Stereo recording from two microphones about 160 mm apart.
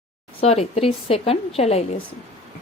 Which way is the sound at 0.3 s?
40° left (ahead or behind).